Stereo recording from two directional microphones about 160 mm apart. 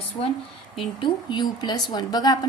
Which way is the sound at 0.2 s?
35° left (ahead or behind).